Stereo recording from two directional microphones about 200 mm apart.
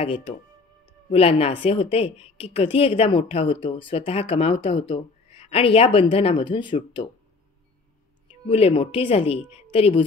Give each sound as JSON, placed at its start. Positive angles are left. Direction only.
{"t": 0.0, "sound": "a woman's voice", "side_deg": 30}
{"t": 8.5, "sound": "a woman's voice", "side_deg": 30}